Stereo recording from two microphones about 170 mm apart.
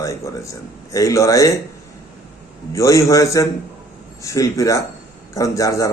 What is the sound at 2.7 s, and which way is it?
A man's voice, 20° left (ahead or behind).